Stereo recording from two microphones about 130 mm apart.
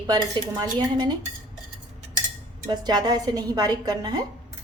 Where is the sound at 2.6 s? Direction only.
35° right (ahead or behind).